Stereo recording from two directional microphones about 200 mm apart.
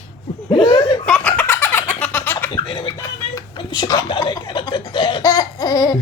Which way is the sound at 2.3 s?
20° left (ahead or behind).